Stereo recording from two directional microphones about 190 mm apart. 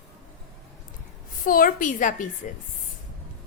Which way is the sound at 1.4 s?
45° left (ahead or behind).